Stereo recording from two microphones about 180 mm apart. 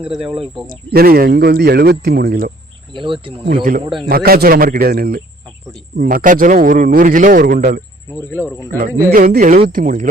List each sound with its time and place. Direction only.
0.7 s speech: 55° right (ahead or behind)
2.9 s speech: 30° right (ahead or behind)
3.6 s speech: 50° right (ahead or behind)
8.3 s speech: 15° right (ahead or behind)
9.1 s speech: 50° right (ahead or behind)